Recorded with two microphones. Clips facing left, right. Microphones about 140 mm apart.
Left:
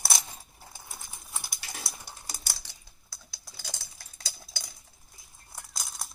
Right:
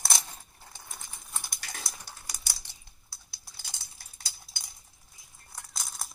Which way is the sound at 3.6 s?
90° left.